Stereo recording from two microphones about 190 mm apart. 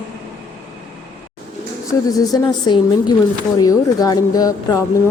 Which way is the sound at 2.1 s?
20° left (ahead or behind).